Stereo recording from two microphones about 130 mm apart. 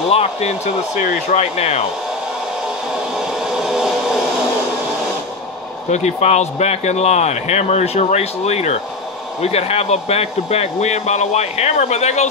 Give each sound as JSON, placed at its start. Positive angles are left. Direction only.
{"t": 0.1, "sound": "speech", "side_deg": 55}
{"t": 2.9, "sound": "a sound", "side_deg": -5}
{"t": 5.9, "sound": "speech", "side_deg": 60}